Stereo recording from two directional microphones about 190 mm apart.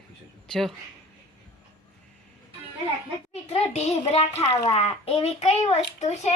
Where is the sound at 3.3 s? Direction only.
35° left (ahead or behind).